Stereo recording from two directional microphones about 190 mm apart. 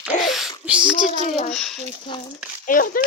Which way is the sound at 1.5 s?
Centre (ahead or behind).